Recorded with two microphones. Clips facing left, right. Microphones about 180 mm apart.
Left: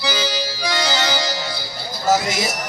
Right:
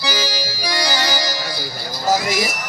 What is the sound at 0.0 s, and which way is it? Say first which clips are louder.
Music: left 1 dB; 25° left (ahead or behind).